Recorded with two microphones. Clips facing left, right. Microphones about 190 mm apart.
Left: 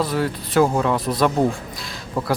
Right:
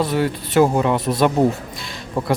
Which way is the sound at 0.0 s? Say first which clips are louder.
Right 2 dB; centre (ahead or behind).